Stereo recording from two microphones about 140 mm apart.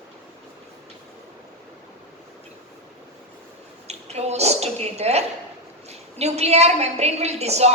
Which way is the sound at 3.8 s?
50° right (ahead or behind).